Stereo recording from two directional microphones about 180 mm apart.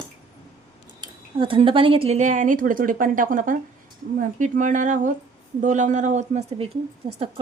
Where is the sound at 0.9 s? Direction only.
30° right (ahead or behind).